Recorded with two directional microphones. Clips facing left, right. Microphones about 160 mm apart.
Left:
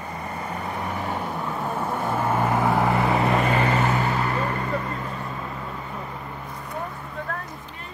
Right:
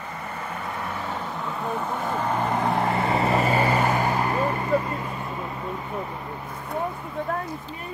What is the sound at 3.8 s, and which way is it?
Vehicle, 40° right (ahead or behind).